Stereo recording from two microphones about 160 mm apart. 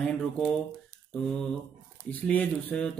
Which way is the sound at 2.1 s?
10° left (ahead or behind).